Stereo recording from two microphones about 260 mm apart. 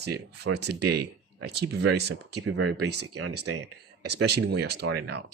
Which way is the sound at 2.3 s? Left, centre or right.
Right.